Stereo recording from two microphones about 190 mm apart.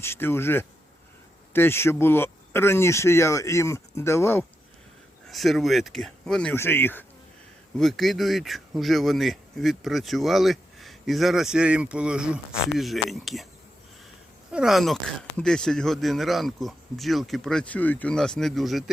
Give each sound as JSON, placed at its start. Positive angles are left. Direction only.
{"t": 0.0, "sound": "speech", "side_deg": 10}
{"t": 5.3, "sound": "speech", "side_deg": 0}
{"t": 7.8, "sound": "speech", "side_deg": 0}
{"t": 14.5, "sound": "speech", "side_deg": -5}